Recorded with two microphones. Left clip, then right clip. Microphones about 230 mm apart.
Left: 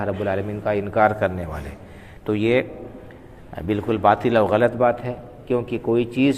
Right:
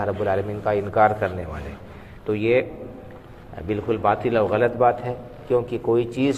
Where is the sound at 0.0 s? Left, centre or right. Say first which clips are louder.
Right 1 dB; left.